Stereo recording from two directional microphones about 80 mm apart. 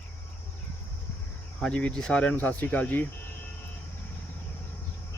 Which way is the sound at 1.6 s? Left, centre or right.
Centre.